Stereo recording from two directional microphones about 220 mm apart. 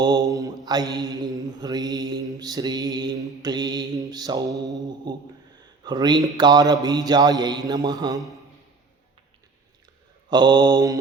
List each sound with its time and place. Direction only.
0.0 s mantra: 15° right (ahead or behind)
5.8 s a man's voice: 20° right (ahead or behind)
6.8 s mantra: 15° right (ahead or behind)
10.2 s a man's voice: 20° right (ahead or behind)